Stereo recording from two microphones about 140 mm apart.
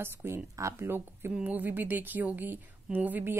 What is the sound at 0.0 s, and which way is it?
A woman's voice, 15° right (ahead or behind).